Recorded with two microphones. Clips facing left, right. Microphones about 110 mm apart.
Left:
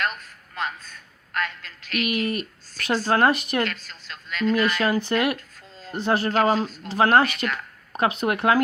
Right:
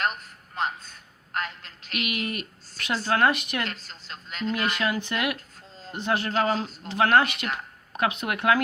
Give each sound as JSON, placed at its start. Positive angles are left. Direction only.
{"t": 0.0, "sound": "a woman's voice", "side_deg": -25}
{"t": 2.0, "sound": "speech", "side_deg": 35}
{"t": 3.6, "sound": "a woman's voice", "side_deg": -25}
{"t": 4.8, "sound": "speech", "side_deg": 35}